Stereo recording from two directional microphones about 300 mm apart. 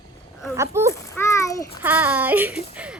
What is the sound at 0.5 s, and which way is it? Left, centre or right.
Speech, centre.